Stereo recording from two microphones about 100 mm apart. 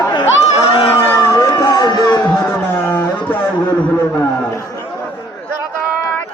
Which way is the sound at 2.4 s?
20° left (ahead or behind).